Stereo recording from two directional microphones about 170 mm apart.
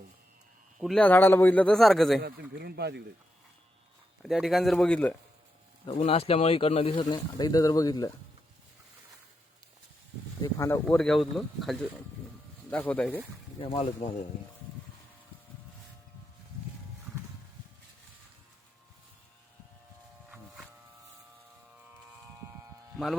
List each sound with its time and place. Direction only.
0.8 s speech: 5° left (ahead or behind)
2.2 s speech: 70° right (ahead or behind)
4.2 s speech: centre (ahead or behind)
5.8 s speech: 35° left (ahead or behind)
10.4 s speech: 15° left (ahead or behind)
10.8 s speech: 5° left (ahead or behind)
13.6 s speech: 35° left (ahead or behind)
22.4 s a sound: 15° right (ahead or behind)